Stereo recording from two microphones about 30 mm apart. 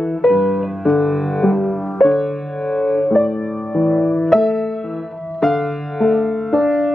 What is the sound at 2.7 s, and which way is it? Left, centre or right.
Music, centre.